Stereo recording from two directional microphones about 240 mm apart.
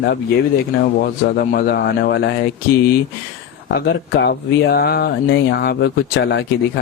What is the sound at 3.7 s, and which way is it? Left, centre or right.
Speech, left.